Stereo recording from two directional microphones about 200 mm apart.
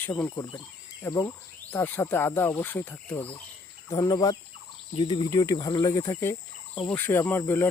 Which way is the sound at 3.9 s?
20° left (ahead or behind).